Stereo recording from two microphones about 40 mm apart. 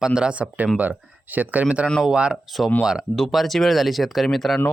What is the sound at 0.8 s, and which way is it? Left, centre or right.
Speech, right.